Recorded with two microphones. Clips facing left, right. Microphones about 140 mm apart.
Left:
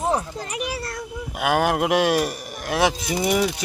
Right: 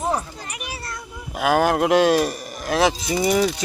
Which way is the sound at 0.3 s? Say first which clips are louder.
Left 6 dB; 90° left.